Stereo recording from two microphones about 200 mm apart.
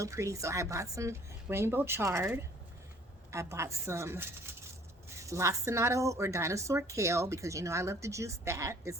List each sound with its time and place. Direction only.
0.0 s a woman's voice: 15° right (ahead or behind)